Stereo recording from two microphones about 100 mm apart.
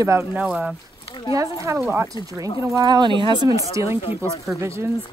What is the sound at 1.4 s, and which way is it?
Speech, 30° right (ahead or behind).